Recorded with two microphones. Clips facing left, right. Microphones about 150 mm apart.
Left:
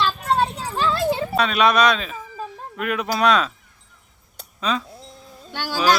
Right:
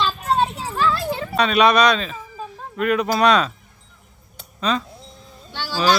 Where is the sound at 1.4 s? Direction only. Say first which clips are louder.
Right 3 dB; centre (ahead or behind).